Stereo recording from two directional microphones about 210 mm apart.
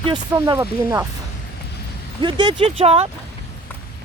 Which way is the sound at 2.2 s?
20° right (ahead or behind).